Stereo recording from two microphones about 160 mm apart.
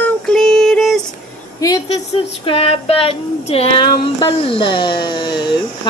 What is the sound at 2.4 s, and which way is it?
Speech, 35° left (ahead or behind).